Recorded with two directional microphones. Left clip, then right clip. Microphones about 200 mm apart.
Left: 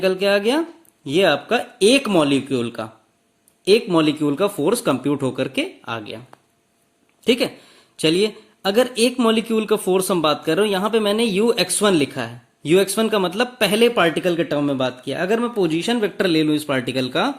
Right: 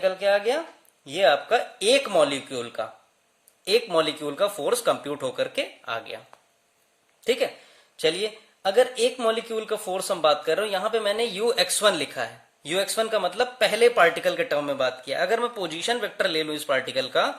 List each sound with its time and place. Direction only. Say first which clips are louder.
0.0 s speech: left 4 dB; 30° left (ahead or behind)